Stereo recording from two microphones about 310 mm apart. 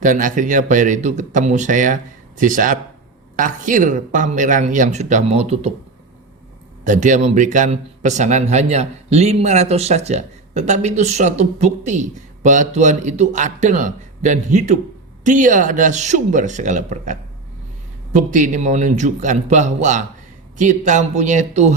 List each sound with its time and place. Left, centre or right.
0.0 s speech: right
6.8 s speech: right